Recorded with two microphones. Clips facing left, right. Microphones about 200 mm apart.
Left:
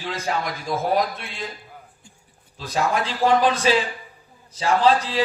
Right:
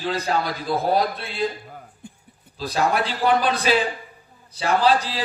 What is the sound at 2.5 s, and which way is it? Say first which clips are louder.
A man's voice: right 1 dB; 35° right (ahead or behind).